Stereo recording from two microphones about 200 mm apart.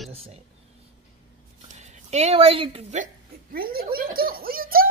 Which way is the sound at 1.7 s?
35° right (ahead or behind).